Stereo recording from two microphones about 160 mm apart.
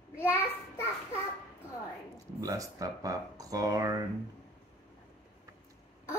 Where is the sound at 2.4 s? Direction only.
20° right (ahead or behind).